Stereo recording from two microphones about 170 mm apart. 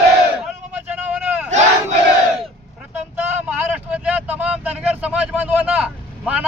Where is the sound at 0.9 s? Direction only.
10° right (ahead or behind).